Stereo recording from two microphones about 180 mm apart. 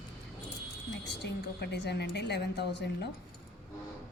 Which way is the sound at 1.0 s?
70° left (ahead or behind).